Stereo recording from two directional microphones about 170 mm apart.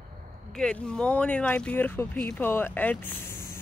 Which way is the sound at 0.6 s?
5° left (ahead or behind).